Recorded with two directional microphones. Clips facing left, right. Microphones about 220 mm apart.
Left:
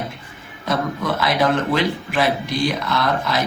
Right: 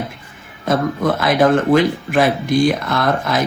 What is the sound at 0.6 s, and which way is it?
Speech, 50° right (ahead or behind).